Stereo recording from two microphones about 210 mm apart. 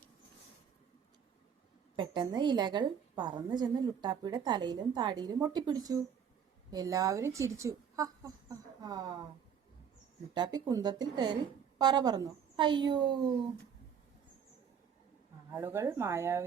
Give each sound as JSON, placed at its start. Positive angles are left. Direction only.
{"t": 2.0, "sound": "a woman's voice", "side_deg": -20}
{"t": 10.3, "sound": "a woman's voice", "side_deg": -20}
{"t": 15.4, "sound": "speech", "side_deg": -10}